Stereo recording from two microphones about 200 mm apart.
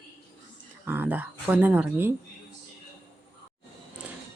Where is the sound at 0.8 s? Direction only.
10° right (ahead or behind).